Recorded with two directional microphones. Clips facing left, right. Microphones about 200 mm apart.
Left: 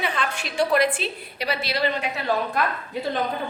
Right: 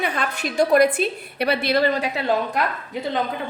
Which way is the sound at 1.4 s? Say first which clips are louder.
Right 6 dB; 55° right (ahead or behind).